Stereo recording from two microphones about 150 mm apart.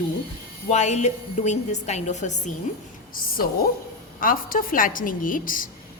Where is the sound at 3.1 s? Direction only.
75° left (ahead or behind).